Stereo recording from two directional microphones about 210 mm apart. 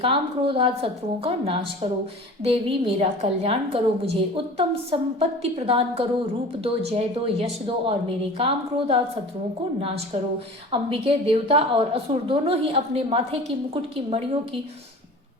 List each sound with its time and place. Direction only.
0.0 s a woman's voice: 25° right (ahead or behind)
10.7 s a woman's voice: 25° right (ahead or behind)